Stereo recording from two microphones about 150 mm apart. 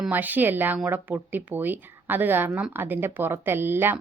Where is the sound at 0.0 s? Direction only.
10° right (ahead or behind).